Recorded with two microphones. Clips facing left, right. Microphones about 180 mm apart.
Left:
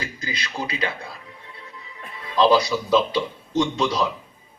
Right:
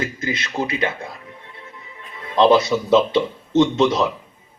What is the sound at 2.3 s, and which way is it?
Speech, 25° right (ahead or behind).